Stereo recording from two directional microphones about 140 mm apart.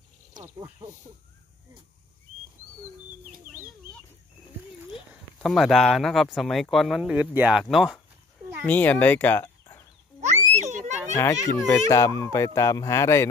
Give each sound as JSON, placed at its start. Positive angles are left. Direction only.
{"t": 5.4, "sound": "speech", "side_deg": 0}
{"t": 8.6, "sound": "speech", "side_deg": 10}
{"t": 10.2, "sound": "a sound", "side_deg": -55}
{"t": 11.1, "sound": "speech", "side_deg": 25}